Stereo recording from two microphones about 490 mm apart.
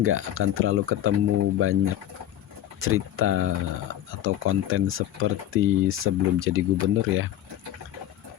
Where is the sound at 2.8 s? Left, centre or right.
Right.